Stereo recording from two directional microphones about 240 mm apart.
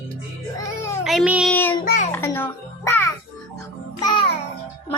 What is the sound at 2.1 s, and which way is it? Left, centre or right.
Music, centre.